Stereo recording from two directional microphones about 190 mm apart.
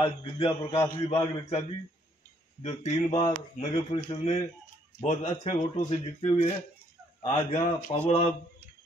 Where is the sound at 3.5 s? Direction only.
30° left (ahead or behind).